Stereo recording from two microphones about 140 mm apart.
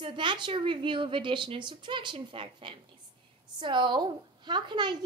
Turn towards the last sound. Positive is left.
turn(degrees=-30)  # may be behind; listen again after turning